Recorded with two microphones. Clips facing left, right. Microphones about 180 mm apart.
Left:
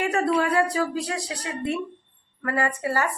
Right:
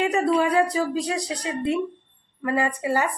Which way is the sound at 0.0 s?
20° right (ahead or behind).